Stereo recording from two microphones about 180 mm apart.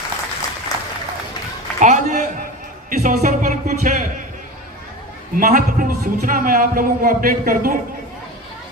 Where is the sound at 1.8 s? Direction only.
45° right (ahead or behind).